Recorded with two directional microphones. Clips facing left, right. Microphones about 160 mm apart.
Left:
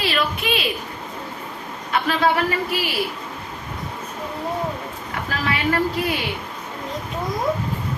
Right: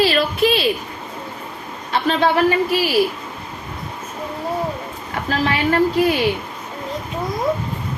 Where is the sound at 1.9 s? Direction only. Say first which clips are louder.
Right 2 dB; 25° right (ahead or behind).